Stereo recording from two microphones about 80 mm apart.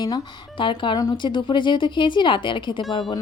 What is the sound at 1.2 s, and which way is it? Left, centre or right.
Speech, left.